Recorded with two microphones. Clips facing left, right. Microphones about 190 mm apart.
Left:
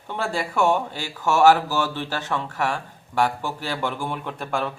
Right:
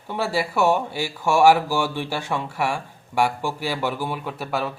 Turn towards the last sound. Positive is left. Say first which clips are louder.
# even
turn(degrees=-5)  # may be behind; listen again after turning